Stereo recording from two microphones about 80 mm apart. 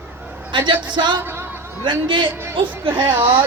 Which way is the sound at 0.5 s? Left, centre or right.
Right.